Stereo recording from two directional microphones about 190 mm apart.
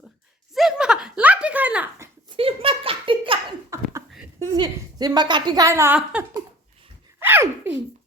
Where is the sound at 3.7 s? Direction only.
15° right (ahead or behind).